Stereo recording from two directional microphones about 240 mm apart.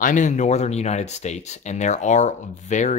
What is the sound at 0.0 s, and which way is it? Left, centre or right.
Speech, left.